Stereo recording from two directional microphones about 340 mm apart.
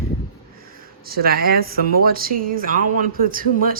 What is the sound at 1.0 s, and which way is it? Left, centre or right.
Speech, right.